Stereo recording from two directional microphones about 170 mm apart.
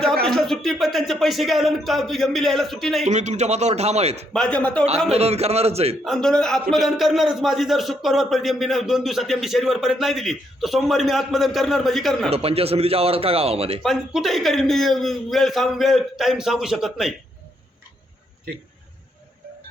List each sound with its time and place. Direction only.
0.3 s a man's voice: centre (ahead or behind)
3.0 s speech: 40° right (ahead or behind)
4.3 s a man's voice: 5° left (ahead or behind)
5.1 s speech: 35° right (ahead or behind)
6.1 s a man's voice: 5° left (ahead or behind)
12.3 s speech: 35° right (ahead or behind)
13.8 s a man's voice: centre (ahead or behind)